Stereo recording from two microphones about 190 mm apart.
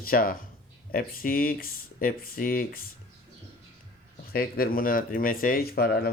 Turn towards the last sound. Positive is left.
turn(degrees=55)  # may be behind; listen again after turning